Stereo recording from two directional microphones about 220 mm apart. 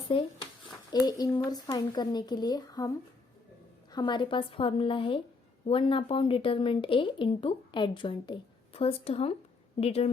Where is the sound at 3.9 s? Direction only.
20° left (ahead or behind).